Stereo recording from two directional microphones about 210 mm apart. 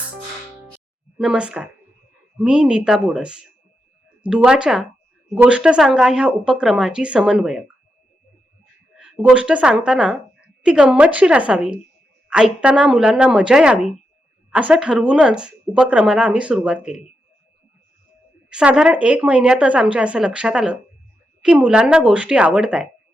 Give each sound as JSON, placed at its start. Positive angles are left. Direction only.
{"t": 1.2, "sound": "speech", "side_deg": -5}
{"t": 9.0, "sound": "speech", "side_deg": -5}
{"t": 18.4, "sound": "speech", "side_deg": -5}